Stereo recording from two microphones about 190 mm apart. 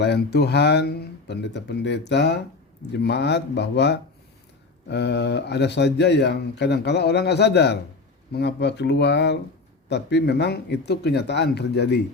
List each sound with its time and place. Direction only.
0.0 s speech: 60° left (ahead or behind)